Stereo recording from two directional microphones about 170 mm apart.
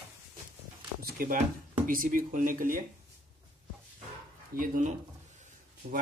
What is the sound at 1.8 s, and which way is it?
Speech, 55° right (ahead or behind).